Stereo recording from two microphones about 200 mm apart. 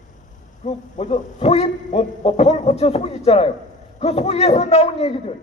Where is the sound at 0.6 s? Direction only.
35° left (ahead or behind).